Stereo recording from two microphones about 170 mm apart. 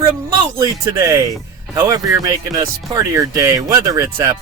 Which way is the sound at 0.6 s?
20° right (ahead or behind).